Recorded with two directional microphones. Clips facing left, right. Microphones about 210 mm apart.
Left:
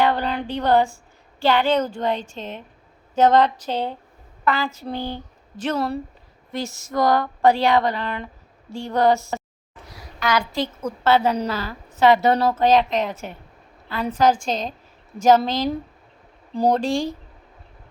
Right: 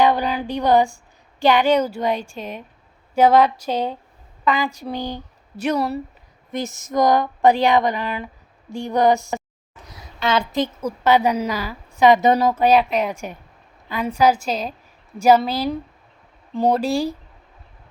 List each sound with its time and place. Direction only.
0.0 s a sound: 10° right (ahead or behind)
1.4 s a woman's voice: 15° right (ahead or behind)
5.7 s speech: centre (ahead or behind)
6.5 s a woman's voice: 20° right (ahead or behind)